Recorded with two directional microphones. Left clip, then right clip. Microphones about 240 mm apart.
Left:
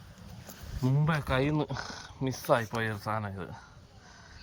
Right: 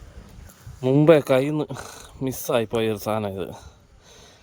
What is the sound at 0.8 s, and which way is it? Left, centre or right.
Speech, right.